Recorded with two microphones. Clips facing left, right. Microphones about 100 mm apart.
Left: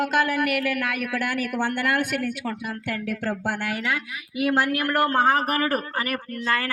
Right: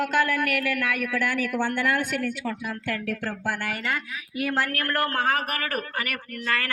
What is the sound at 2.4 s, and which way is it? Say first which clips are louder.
A man's voice: even; 15° left (ahead or behind).